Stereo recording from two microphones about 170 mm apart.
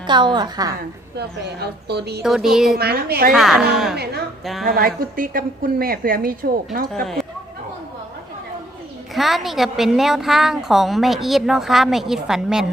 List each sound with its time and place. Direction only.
0.1 s a woman's voice: 25° right (ahead or behind)
1.1 s a woman's voice: 75° right (ahead or behind)
2.2 s a woman's voice: centre (ahead or behind)
2.7 s a woman's voice: 70° right (ahead or behind)
3.3 s a woman's voice: centre (ahead or behind)
3.9 s a woman's voice: 70° right (ahead or behind)
4.6 s a woman's voice: 60° right (ahead or behind)
6.8 s a woman's voice: 5° left (ahead or behind)
9.1 s a woman's voice: centre (ahead or behind)